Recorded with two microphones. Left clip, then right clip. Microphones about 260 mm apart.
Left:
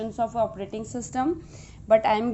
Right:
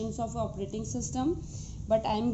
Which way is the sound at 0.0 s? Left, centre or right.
Left.